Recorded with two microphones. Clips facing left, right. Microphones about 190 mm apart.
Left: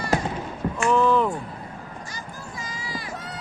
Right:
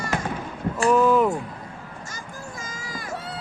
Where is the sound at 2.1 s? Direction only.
45° right (ahead or behind).